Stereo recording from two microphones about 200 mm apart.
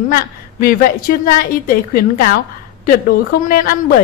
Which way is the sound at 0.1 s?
45° left (ahead or behind).